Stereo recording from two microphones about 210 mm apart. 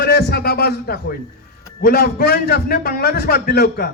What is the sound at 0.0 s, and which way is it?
A man's voice, 50° left (ahead or behind).